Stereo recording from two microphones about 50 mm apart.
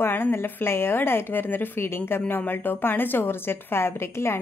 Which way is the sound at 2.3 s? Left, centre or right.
Left.